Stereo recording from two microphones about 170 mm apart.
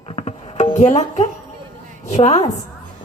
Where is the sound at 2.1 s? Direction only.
40° left (ahead or behind).